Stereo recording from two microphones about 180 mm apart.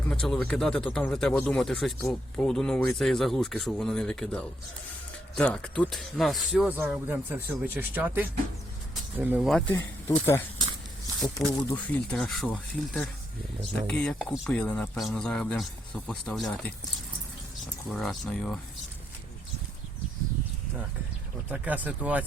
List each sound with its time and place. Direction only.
0.1 s speech: 5° left (ahead or behind)
9.5 s speech: 5° left (ahead or behind)
9.7 s speech: 15° left (ahead or behind)
11.7 s speech: 5° left (ahead or behind)
17.8 s speech: centre (ahead or behind)
21.5 s speech: 10° right (ahead or behind)